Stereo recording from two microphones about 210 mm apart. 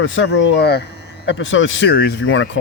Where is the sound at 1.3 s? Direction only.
60° left (ahead or behind).